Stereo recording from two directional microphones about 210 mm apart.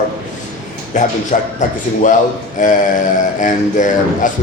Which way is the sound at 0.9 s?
35° left (ahead or behind).